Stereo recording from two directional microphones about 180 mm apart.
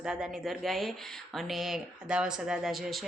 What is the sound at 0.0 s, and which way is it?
A woman's voice, 5° right (ahead or behind).